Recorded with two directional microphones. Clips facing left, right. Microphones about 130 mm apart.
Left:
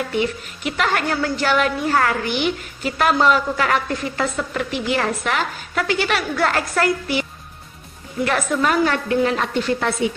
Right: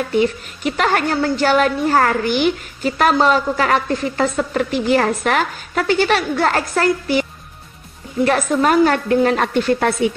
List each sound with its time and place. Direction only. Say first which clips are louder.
0.2 s a woman's voice: right 5 dB; 40° right (ahead or behind)